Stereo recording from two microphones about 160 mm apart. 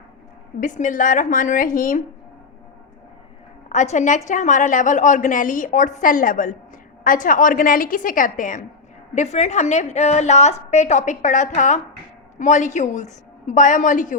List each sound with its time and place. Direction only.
0.6 s a woman's voice: 55° left (ahead or behind)
3.7 s a woman's voice: 45° left (ahead or behind)
9.1 s a woman's voice: 45° left (ahead or behind)